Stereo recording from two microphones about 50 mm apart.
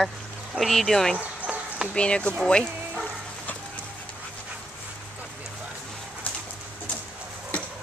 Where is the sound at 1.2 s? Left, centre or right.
Right.